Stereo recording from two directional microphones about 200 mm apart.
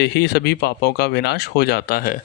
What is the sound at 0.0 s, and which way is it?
Speech, 55° left (ahead or behind).